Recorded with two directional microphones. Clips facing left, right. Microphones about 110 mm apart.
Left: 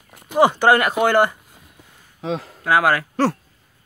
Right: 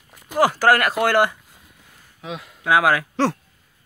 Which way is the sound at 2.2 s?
35° left (ahead or behind).